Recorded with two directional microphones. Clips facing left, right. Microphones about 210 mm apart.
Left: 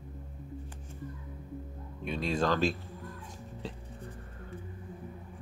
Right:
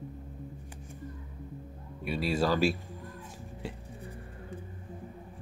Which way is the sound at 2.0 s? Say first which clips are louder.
Right 1 dB; 5° right (ahead or behind).